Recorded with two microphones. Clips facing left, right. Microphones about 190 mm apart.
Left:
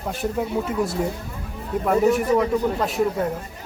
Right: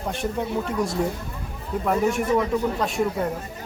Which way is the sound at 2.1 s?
Centre (ahead or behind).